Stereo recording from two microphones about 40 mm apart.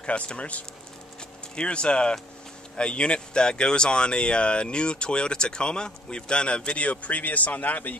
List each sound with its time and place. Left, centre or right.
0.0 s speech: left